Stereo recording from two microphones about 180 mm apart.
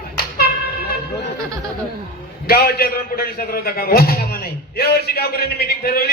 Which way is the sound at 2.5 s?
55° left (ahead or behind).